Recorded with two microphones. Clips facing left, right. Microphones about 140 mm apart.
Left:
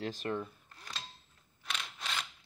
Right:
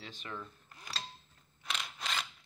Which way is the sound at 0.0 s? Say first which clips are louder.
Left 9 dB; 45° left (ahead or behind).